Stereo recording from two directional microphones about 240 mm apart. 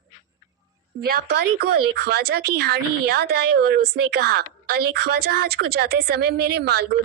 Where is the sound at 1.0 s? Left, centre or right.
Right.